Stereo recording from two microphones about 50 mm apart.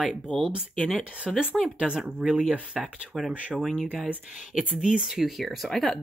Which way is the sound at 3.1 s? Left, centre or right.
Centre.